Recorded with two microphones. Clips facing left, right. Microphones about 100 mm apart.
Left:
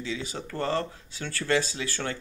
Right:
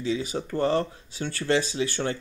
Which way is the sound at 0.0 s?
20° right (ahead or behind).